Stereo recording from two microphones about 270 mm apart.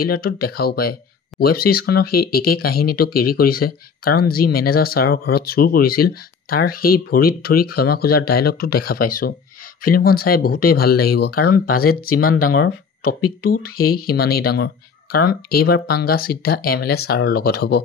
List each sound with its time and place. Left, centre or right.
0.0 s speech: left
12.3 s speech: left
12.5 s speech: left